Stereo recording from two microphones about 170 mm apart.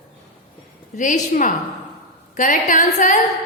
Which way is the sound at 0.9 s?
50° left (ahead or behind).